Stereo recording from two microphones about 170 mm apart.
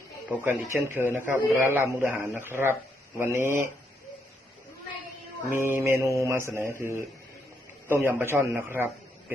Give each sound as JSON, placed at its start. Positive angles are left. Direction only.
{"t": 0.3, "sound": "speech", "side_deg": -15}
{"t": 5.5, "sound": "speech", "side_deg": -15}